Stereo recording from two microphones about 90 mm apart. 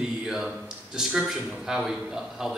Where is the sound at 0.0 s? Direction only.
5° right (ahead or behind).